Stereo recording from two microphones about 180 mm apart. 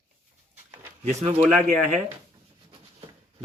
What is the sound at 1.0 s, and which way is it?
A man's voice, 40° right (ahead or behind).